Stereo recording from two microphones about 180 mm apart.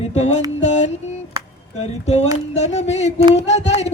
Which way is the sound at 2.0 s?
40° left (ahead or behind).